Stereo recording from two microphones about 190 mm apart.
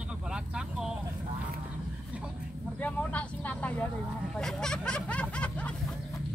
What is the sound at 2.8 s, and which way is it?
Vehicle, 5° left (ahead or behind).